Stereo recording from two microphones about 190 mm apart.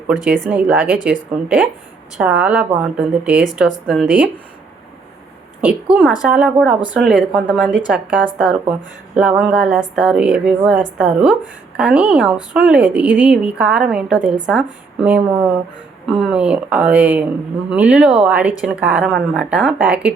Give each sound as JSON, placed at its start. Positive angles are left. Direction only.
{"t": 0.3, "sound": "a woman's voice", "side_deg": 0}
{"t": 5.6, "sound": "a woman's voice", "side_deg": -5}